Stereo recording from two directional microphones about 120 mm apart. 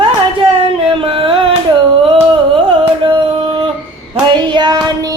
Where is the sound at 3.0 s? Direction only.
45° right (ahead or behind).